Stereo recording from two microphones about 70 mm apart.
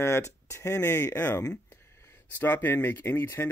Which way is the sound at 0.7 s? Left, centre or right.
Left.